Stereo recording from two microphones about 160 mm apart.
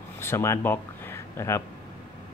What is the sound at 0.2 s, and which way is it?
Speech, 15° left (ahead or behind).